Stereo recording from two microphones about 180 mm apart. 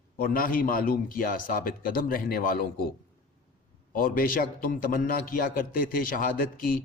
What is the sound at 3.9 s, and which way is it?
A man's voice, 50° left (ahead or behind).